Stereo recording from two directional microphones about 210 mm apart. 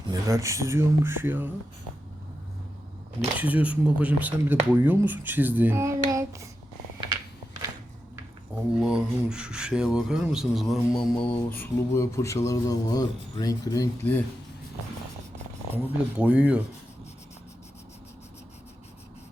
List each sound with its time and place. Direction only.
0.1 s speech: 15° right (ahead or behind)
3.3 s speech: 5° right (ahead or behind)
8.8 s speech: 5° right (ahead or behind); by 14.2 s 10° left (ahead or behind)
15.7 s speech: 5° right (ahead or behind)